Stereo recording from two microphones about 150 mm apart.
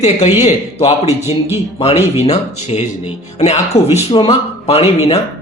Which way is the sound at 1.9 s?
15° right (ahead or behind).